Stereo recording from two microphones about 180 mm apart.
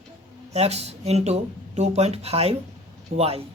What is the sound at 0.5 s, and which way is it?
Speech, 35° right (ahead or behind).